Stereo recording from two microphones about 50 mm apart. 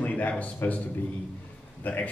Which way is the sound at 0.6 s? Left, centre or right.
Left.